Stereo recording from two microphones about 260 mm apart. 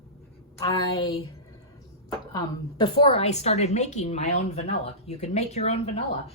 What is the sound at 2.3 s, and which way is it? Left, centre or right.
A woman's voice, centre.